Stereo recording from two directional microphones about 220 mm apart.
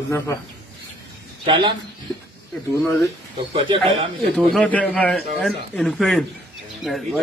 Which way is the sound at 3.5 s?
25° right (ahead or behind).